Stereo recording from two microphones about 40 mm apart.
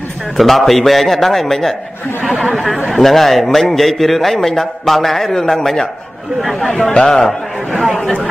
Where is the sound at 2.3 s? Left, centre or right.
Right.